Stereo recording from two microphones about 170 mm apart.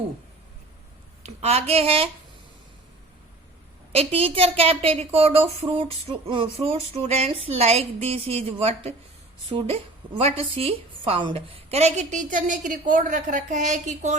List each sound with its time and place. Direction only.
1.2 s a woman's voice: 40° right (ahead or behind)
3.9 s a woman's voice: 35° right (ahead or behind)